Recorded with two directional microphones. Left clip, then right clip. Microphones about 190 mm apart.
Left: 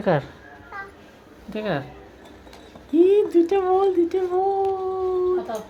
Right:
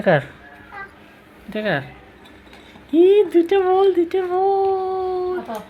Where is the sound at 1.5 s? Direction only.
10° right (ahead or behind).